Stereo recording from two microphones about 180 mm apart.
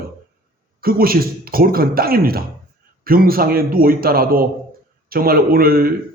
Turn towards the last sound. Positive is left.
turn(degrees=-55)  # may be behind; listen again after turning